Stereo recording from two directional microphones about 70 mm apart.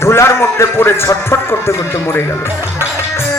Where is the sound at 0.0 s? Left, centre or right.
Left.